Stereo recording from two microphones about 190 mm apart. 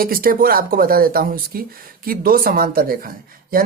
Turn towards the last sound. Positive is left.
turn(degrees=-50)  # may be behind; listen again after turning